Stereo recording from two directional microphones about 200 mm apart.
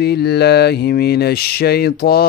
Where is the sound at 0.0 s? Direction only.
55° left (ahead or behind).